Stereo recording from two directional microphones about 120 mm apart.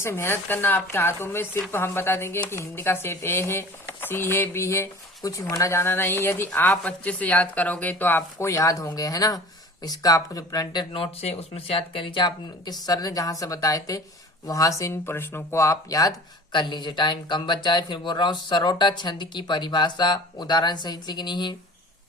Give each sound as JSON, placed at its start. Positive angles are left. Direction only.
{"t": 0.0, "sound": "speech", "side_deg": 20}